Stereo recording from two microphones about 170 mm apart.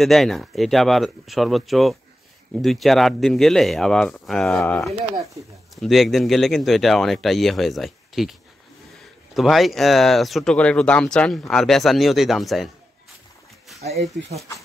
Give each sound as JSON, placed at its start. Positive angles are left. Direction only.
{"t": 0.0, "sound": "speech", "side_deg": 0}
{"t": 5.1, "sound": "speech", "side_deg": -20}
{"t": 5.8, "sound": "speech", "side_deg": 0}
{"t": 13.7, "sound": "speech", "side_deg": -40}